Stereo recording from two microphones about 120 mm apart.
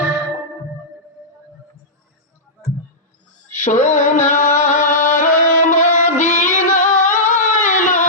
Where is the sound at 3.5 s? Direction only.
90° left.